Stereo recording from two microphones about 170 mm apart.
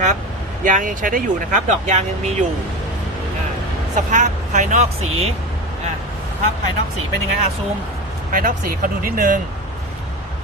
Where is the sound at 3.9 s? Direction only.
45° right (ahead or behind).